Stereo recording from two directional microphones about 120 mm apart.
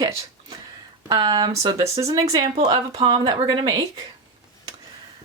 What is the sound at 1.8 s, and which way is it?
Speech, 25° right (ahead or behind).